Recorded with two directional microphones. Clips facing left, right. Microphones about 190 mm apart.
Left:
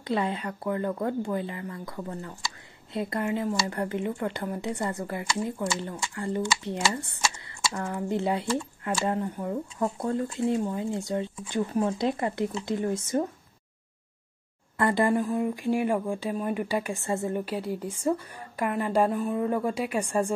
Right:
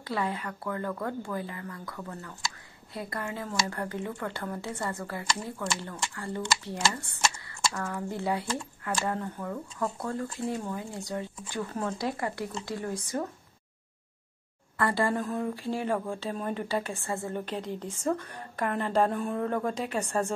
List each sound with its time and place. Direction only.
0.0 s speech: 20° left (ahead or behind)
14.8 s a woman's voice: 20° left (ahead or behind)
17.5 s a woman's voice: 10° left (ahead or behind)